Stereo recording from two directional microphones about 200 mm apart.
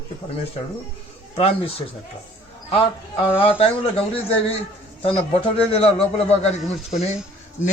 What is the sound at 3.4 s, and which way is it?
A man's voice, 30° left (ahead or behind).